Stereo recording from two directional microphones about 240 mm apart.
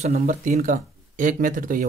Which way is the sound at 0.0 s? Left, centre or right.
Right.